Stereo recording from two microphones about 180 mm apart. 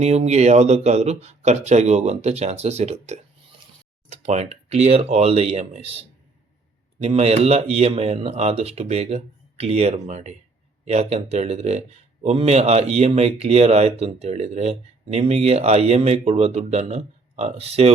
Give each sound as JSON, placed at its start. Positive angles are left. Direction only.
{"t": 0.0, "sound": "speech", "side_deg": -35}
{"t": 7.0, "sound": "speech", "side_deg": -35}